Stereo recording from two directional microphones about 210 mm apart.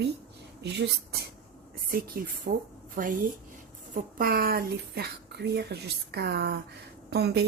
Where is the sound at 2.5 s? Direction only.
45° right (ahead or behind).